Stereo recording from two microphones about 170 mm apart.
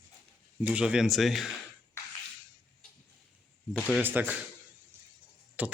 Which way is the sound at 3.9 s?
10° right (ahead or behind).